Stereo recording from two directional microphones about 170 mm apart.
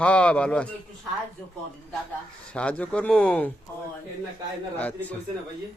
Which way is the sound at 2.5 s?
5° left (ahead or behind).